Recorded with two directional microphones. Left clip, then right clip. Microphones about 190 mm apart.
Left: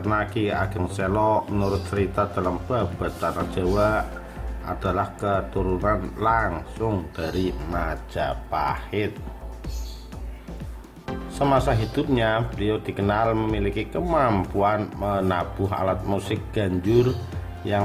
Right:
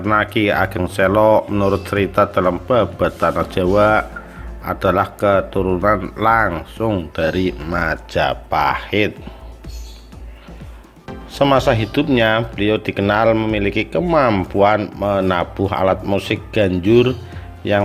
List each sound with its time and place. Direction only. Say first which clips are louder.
0.0 s speech: right 8 dB; 25° right (ahead or behind)
11.3 s speech: right 7 dB; 20° right (ahead or behind)